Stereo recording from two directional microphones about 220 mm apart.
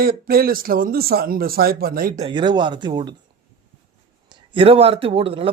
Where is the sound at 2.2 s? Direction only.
20° right (ahead or behind).